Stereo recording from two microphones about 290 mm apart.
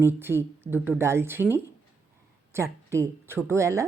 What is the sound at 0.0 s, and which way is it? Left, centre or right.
A woman's voice, centre.